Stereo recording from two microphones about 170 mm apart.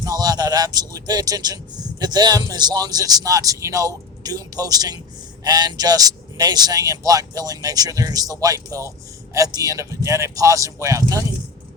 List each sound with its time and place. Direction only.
0.0 s speech: 20° right (ahead or behind)